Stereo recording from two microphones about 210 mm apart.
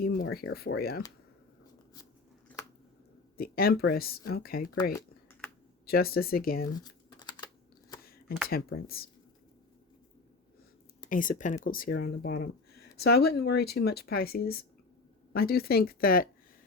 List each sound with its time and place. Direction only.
0.0 s speech: 45° left (ahead or behind)
3.3 s speech: 45° left (ahead or behind)
4.9 s typing: 10° left (ahead or behind)
5.8 s speech: 45° left (ahead or behind)
6.7 s typing: 20° left (ahead or behind)
8.4 s speech: 45° left (ahead or behind)
11.1 s speech: 40° left (ahead or behind)